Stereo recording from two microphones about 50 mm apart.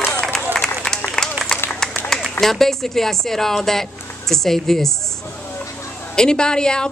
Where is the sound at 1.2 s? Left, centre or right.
Centre.